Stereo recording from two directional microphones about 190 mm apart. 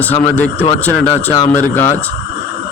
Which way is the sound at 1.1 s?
35° left (ahead or behind).